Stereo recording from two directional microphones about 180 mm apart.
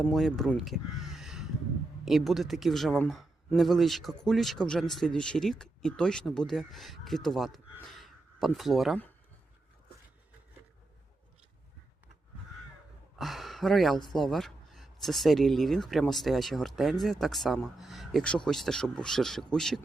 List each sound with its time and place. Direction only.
0.0 s speech: centre (ahead or behind)
13.1 s speech: centre (ahead or behind)